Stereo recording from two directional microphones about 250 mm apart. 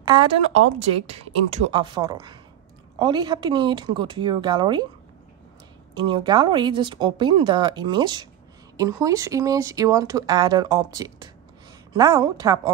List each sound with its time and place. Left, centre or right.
0.0 s speech: centre
5.9 s speech: centre